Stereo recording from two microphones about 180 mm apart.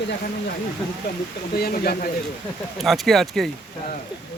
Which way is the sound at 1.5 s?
60° left (ahead or behind).